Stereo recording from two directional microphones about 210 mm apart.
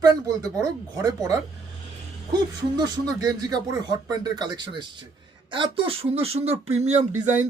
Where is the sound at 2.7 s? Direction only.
20° right (ahead or behind).